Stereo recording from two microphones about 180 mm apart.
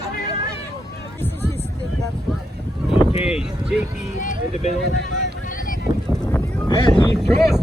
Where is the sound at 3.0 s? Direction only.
35° left (ahead or behind).